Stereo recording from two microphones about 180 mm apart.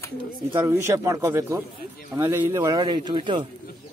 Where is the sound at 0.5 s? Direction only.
15° right (ahead or behind).